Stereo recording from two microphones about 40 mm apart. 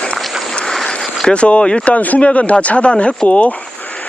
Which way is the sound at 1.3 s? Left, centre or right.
Left.